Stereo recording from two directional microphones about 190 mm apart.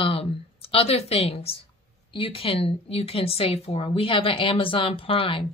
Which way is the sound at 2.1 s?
30° left (ahead or behind).